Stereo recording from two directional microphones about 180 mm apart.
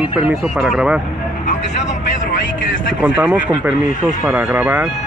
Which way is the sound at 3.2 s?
5° right (ahead or behind).